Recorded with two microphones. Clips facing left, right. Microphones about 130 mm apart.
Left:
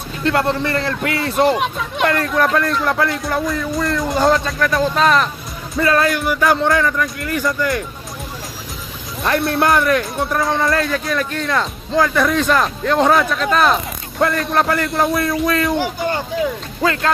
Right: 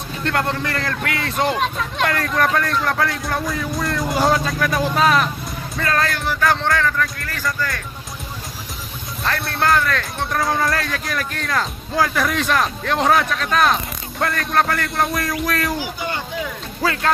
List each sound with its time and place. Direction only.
0.2 s a man's voice: 5° left (ahead or behind)
5.8 s speech: 5° left (ahead or behind)
9.2 s speech: 15° left (ahead or behind)
10.4 s a man's voice: centre (ahead or behind)
16.8 s a man's voice: centre (ahead or behind)